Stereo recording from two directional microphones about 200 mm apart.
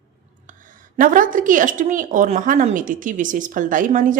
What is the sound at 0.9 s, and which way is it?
A woman's voice, 40° right (ahead or behind).